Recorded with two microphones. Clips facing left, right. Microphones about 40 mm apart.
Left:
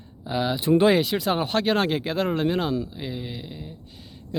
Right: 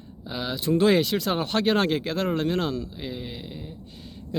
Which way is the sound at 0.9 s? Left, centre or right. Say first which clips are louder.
Left 1 dB; centre.